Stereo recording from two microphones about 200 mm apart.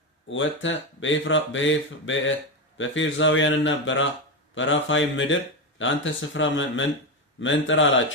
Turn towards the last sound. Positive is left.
turn(degrees=70)  # may be behind; listen again after turning